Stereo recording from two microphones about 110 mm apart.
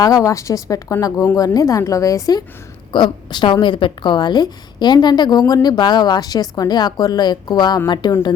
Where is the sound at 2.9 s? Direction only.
45° left (ahead or behind).